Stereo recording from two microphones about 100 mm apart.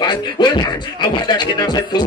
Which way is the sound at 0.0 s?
50° left (ahead or behind).